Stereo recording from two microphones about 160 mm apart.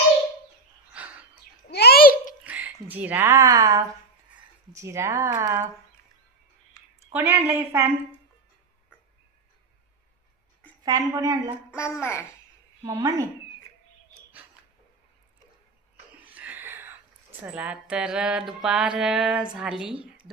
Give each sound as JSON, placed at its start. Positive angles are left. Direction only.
{"t": 0.9, "sound": "bird", "side_deg": -10}
{"t": 1.6, "sound": "a sound", "side_deg": 85}
{"t": 2.4, "sound": "a sound", "side_deg": -10}
{"t": 2.8, "sound": "speech", "side_deg": -10}
{"t": 7.1, "sound": "speech", "side_deg": -15}
{"t": 10.8, "sound": "a woman's voice", "side_deg": -20}
{"t": 11.7, "sound": "a child's voice", "side_deg": 15}
{"t": 12.8, "sound": "a woman's voice", "side_deg": -20}
{"t": 16.2, "sound": "a sound", "side_deg": -10}
{"t": 17.4, "sound": "music", "side_deg": -10}